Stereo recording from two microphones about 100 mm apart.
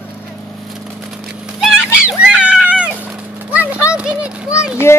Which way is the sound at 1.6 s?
10° right (ahead or behind).